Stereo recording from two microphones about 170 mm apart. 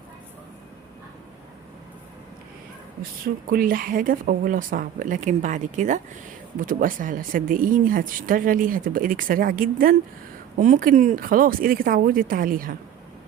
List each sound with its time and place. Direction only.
3.5 s speech: 55° right (ahead or behind)